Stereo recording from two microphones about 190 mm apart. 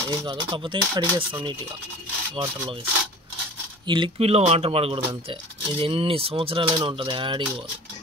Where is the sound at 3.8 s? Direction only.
25° right (ahead or behind).